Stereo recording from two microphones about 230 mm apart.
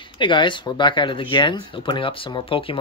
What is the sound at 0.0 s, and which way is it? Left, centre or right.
Speech, left.